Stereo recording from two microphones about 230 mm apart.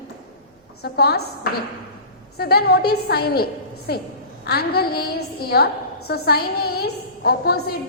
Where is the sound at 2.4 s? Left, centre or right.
Left.